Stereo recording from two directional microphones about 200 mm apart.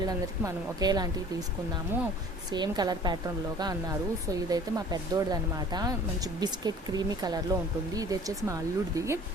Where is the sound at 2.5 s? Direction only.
20° right (ahead or behind).